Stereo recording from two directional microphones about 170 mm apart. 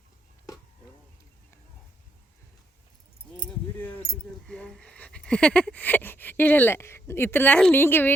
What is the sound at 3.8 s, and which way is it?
Keys jangling, 10° left (ahead or behind).